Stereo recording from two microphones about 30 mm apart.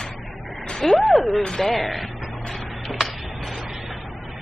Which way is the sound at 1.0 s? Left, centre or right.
Centre.